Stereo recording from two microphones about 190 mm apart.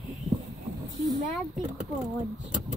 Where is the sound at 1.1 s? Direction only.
Centre (ahead or behind).